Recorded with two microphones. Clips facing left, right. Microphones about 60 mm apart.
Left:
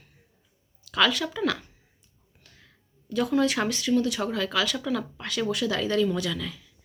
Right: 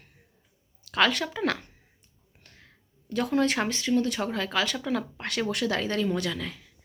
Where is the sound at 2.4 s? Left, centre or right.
Right.